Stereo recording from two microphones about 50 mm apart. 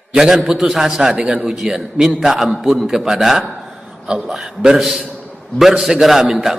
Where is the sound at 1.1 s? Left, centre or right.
Right.